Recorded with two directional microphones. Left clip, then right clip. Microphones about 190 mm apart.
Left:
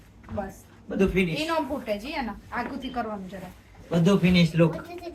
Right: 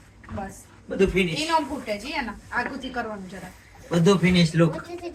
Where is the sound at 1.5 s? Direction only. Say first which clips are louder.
Right 3 dB; 20° left (ahead or behind).